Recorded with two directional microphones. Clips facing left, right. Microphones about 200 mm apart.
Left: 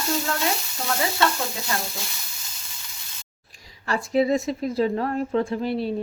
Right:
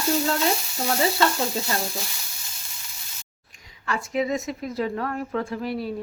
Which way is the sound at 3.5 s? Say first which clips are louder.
Left 2 dB; 35° left (ahead or behind).